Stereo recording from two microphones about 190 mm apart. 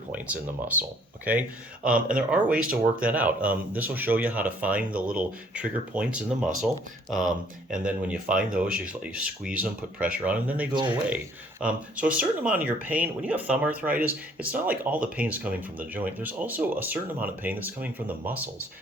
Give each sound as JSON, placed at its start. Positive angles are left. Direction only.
{"t": 0.8, "sound": "speech", "side_deg": -10}
{"t": 7.9, "sound": "speech", "side_deg": -5}
{"t": 10.7, "sound": "speech", "side_deg": -25}
{"t": 11.6, "sound": "speech", "side_deg": -5}